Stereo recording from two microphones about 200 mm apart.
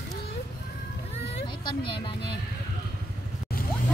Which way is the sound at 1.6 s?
25° left (ahead or behind).